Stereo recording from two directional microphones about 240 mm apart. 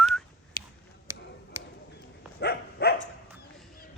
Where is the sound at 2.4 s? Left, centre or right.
Left.